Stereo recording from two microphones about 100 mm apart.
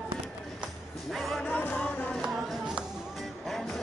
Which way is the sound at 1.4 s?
20° left (ahead or behind).